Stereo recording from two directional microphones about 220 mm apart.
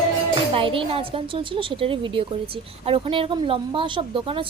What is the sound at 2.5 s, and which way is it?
Speech, 25° right (ahead or behind).